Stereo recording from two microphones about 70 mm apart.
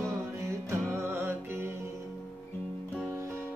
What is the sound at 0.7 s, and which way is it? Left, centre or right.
Music, right.